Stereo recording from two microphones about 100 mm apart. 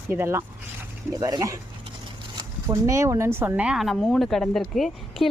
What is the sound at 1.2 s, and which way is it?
Speech, 35° right (ahead or behind).